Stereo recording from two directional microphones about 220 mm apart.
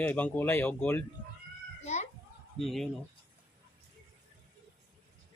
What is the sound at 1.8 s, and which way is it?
Chicken, 30° left (ahead or behind).